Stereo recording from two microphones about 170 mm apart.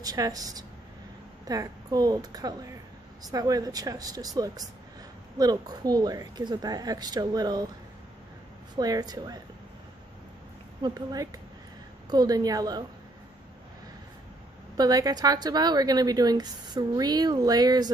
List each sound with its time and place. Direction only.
0.0 s a woman's voice: 20° right (ahead or behind)
8.7 s a woman's voice: 20° right (ahead or behind)
10.8 s a woman's voice: 20° right (ahead or behind)
14.8 s a woman's voice: 20° right (ahead or behind)